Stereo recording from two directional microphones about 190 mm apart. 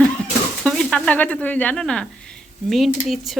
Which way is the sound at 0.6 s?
5° left (ahead or behind).